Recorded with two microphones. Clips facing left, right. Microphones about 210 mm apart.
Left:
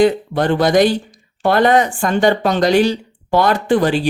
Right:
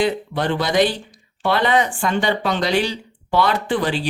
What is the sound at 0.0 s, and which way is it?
Speech, 45° left (ahead or behind).